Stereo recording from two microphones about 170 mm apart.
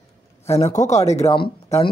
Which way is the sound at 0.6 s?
45° left (ahead or behind).